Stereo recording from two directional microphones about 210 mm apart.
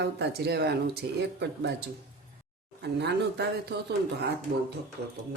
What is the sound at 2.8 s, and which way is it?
Speech, 55° right (ahead or behind).